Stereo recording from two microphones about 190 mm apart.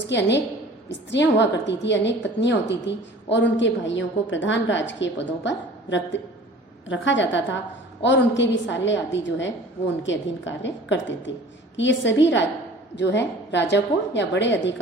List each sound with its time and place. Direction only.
0.1 s a woman's voice: 65° left (ahead or behind)